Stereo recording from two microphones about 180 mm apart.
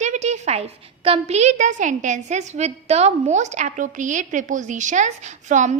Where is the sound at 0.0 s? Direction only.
40° right (ahead or behind).